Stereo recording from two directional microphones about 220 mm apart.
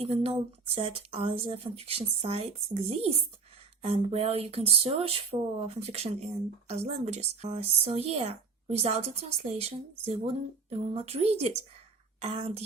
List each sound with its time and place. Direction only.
0.0 s a woman's voice: 25° right (ahead or behind)
3.8 s a woman's voice: 25° right (ahead or behind)